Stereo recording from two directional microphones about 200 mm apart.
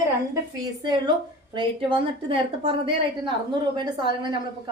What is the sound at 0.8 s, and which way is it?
A woman's voice, 20° right (ahead or behind).